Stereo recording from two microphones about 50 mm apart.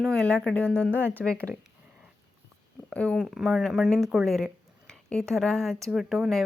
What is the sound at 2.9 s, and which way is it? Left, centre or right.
Speech, left.